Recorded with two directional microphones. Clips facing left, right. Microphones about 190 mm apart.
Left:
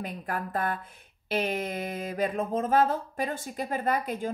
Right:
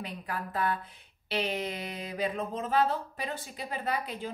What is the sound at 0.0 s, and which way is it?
Speech, 50° left (ahead or behind).